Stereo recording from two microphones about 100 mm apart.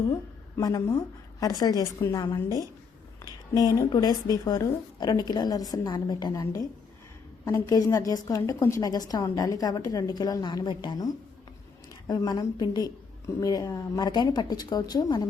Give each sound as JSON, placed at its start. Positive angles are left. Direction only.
{"t": 0.1, "sound": "a woman's voice", "side_deg": 35}
{"t": 2.2, "sound": "a woman's voice", "side_deg": 40}
{"t": 3.2, "sound": "a sound", "side_deg": 35}
{"t": 3.8, "sound": "a woman's voice", "side_deg": 40}